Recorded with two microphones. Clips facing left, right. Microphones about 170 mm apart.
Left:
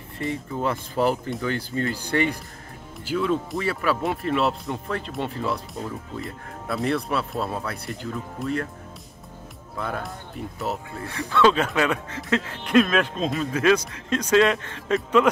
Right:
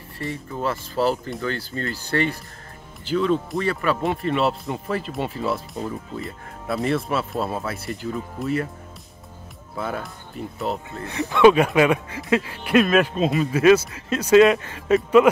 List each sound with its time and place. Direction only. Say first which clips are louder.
0.2 s speech: left 1 dB; 20° left (ahead or behind); by 8.6 s 5° right (ahead or behind)
9.8 s speech: right 1 dB; 5° right (ahead or behind)
11.1 s speech: right 5 dB; 20° right (ahead or behind)